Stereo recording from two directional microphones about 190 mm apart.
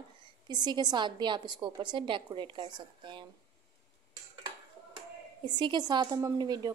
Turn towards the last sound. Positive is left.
turn(degrees=-20)  # may be behind; listen again after turning